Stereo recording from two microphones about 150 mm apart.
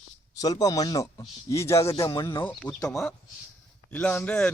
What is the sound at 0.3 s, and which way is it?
Speech, 25° left (ahead or behind).